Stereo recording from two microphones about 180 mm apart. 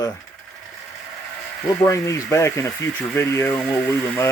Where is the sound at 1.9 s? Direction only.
15° left (ahead or behind).